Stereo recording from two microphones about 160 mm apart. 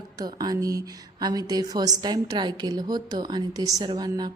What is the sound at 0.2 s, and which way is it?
Mantra, 25° right (ahead or behind).